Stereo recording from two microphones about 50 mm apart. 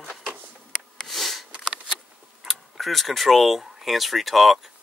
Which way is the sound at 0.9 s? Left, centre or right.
Centre.